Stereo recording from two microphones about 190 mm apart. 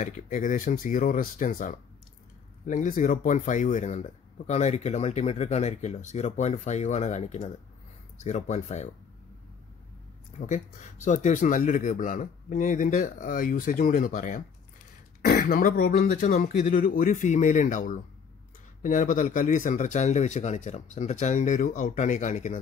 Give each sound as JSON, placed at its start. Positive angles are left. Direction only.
{"t": 0.0, "sound": "speech", "side_deg": 40}
{"t": 10.4, "sound": "speech", "side_deg": 40}